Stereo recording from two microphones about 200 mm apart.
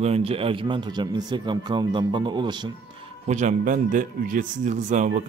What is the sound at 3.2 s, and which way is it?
Speech, 35° right (ahead or behind).